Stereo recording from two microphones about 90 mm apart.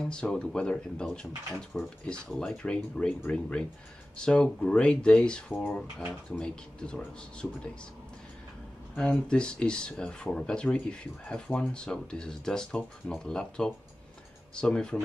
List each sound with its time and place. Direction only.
0.0 s speech: 10° left (ahead or behind)
8.9 s speech: 10° left (ahead or behind)